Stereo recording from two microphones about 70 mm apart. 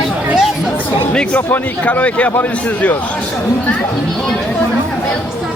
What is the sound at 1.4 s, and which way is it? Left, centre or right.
A man's voice, left.